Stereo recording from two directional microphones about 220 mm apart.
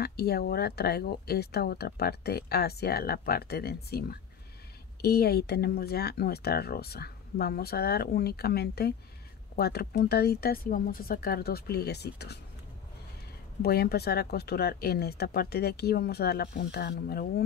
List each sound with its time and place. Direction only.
0.0 s speech: 45° left (ahead or behind)
13.6 s speech: 45° left (ahead or behind)